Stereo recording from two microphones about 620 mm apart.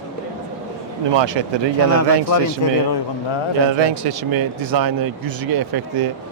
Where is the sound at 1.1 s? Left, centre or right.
Right.